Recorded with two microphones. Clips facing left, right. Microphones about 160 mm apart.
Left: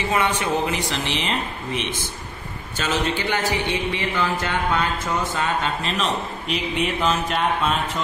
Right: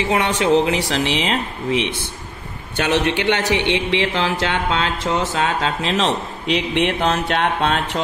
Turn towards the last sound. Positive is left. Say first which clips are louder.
# right 3 dB
turn(degrees=-80)